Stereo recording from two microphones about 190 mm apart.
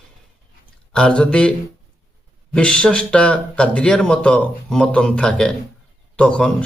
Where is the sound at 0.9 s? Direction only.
5° left (ahead or behind).